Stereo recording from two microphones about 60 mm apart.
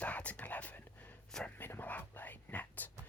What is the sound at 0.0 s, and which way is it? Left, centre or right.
Whispering, left.